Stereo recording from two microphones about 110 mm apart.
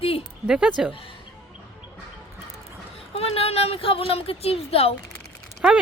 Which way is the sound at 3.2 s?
65° left (ahead or behind).